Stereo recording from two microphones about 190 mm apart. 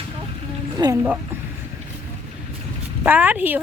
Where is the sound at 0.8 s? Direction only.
20° right (ahead or behind).